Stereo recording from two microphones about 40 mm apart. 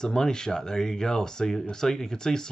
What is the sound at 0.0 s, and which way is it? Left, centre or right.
Speech, centre.